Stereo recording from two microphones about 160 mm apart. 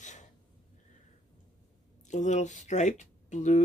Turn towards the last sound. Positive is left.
turn(degrees=45)  # may be behind; listen again after turning